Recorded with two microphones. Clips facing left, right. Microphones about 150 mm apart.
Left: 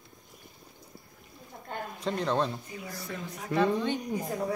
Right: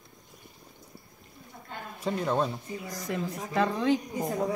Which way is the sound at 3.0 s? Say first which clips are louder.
Right 5 dB; 90° right.